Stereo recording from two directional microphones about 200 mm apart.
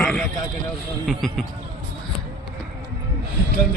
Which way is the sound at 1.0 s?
Centre (ahead or behind).